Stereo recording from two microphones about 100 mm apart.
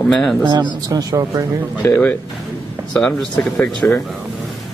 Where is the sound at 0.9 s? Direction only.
35° right (ahead or behind).